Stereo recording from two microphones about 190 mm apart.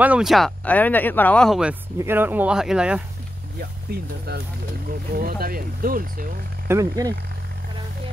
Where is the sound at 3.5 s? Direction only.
55° right (ahead or behind).